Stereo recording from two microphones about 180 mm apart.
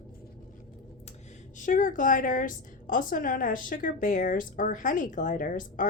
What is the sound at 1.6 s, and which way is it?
A woman's voice, 45° left (ahead or behind).